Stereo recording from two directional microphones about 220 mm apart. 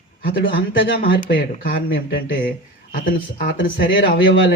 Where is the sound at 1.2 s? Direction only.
40° left (ahead or behind).